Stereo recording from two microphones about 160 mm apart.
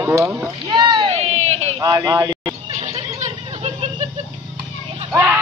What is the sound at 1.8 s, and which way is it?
Speech, 20° right (ahead or behind).